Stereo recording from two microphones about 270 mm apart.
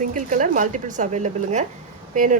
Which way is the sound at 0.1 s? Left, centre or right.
Right.